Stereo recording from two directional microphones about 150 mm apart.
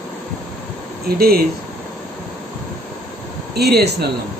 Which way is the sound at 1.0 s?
90° right.